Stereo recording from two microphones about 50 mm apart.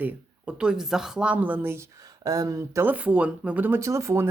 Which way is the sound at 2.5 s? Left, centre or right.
Right.